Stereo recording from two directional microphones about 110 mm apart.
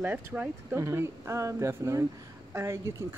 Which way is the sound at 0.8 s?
25° right (ahead or behind).